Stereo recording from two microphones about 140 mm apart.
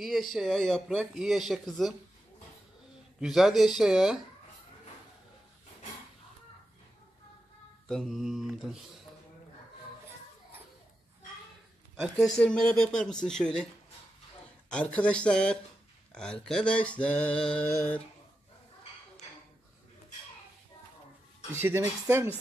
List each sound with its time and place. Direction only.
0.0 s speech: centre (ahead or behind)
3.2 s speech: 5° right (ahead or behind)
7.9 s speech: centre (ahead or behind)
12.0 s speech: 5° left (ahead or behind)
14.7 s a sound: 10° left (ahead or behind)
21.5 s speech: 15° right (ahead or behind)